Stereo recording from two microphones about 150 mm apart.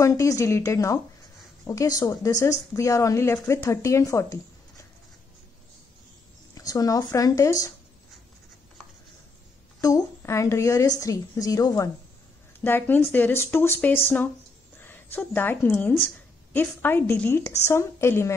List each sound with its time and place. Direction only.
0.0 s speech: 20° left (ahead or behind)
6.5 s speech: 25° left (ahead or behind)
9.8 s a woman's voice: 25° left (ahead or behind)